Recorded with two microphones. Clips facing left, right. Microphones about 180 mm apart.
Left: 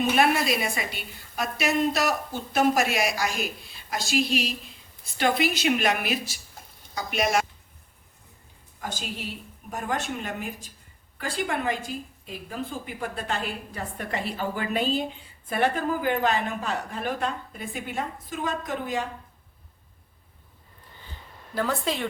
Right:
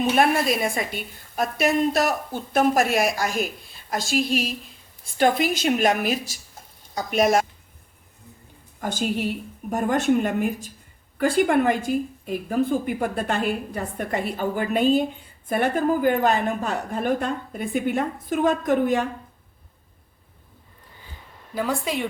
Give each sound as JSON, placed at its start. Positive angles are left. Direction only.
{"t": 0.2, "sound": "a woman's voice", "side_deg": -50}
{"t": 8.8, "sound": "a woman's voice", "side_deg": -50}
{"t": 21.5, "sound": "a woman's voice", "side_deg": -10}